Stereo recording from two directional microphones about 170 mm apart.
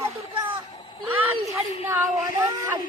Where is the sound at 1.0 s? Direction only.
10° right (ahead or behind).